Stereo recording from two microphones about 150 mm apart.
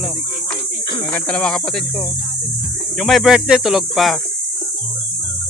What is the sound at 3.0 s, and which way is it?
Hum, centre (ahead or behind).